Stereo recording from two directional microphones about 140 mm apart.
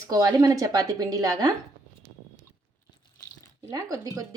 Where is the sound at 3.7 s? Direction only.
25° right (ahead or behind).